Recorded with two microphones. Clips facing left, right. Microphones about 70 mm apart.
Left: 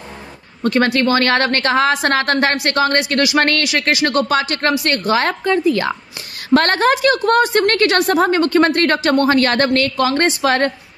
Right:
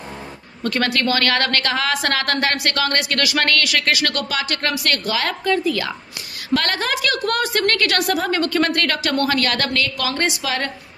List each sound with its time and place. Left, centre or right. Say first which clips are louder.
0.7 s a woman's voice: left 5 dB; left